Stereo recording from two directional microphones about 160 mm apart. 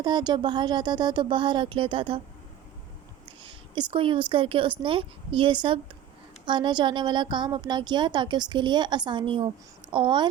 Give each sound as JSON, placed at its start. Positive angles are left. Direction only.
{"t": 0.0, "sound": "a woman's voice", "side_deg": -30}
{"t": 3.2, "sound": "a woman's voice", "side_deg": -30}